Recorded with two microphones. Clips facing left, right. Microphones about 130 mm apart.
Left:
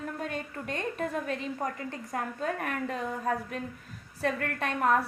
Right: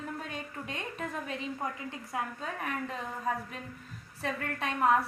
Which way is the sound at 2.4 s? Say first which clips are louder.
Left 4 dB; 55° left (ahead or behind).